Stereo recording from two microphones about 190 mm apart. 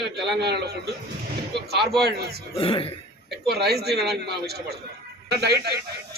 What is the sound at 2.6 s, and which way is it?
Speech, 30° left (ahead or behind).